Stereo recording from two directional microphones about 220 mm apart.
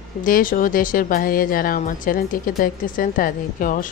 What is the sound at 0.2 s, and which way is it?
Speech, 40° left (ahead or behind).